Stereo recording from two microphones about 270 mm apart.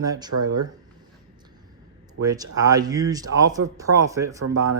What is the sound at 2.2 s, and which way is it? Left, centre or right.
Speech, centre.